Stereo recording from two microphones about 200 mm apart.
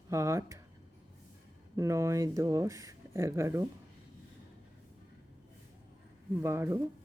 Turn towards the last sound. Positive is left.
turn(degrees=-15)  # may be behind; listen again after turning